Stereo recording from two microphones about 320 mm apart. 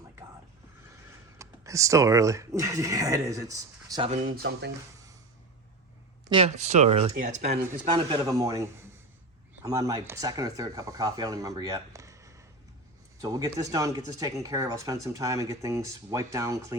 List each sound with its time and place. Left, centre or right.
1.4 s speech: centre; by 4.7 s right
6.2 s speech: centre